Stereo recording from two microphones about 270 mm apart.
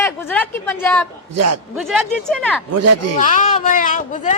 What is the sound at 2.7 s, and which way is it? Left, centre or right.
Speech, right.